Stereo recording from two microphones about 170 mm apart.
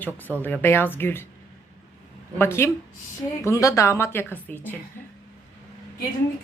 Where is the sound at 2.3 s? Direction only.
15° left (ahead or behind).